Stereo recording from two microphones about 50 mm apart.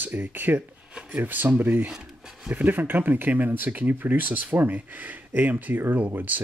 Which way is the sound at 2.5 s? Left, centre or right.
Right.